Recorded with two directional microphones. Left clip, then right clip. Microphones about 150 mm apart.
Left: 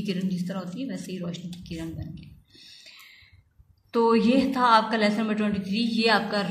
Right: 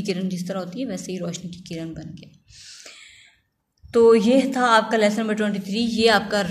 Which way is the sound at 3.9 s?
35° right (ahead or behind).